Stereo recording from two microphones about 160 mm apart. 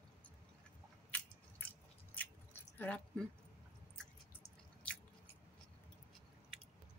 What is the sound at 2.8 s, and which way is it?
Speech, 10° left (ahead or behind).